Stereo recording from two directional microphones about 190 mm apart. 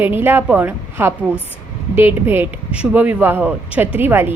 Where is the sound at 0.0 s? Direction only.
10° right (ahead or behind).